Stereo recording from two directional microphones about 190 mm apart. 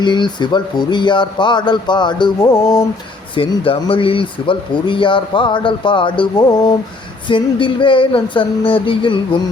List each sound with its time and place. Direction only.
0.0 s speech: 25° left (ahead or behind)
3.3 s speech: 30° left (ahead or behind)